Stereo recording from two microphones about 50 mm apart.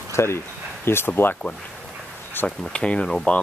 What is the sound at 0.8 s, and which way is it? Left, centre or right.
Speech, left.